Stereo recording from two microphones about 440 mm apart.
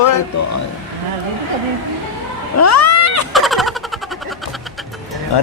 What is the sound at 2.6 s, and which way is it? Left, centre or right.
Cat, left.